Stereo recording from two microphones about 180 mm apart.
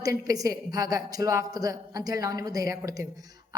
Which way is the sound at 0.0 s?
20° right (ahead or behind).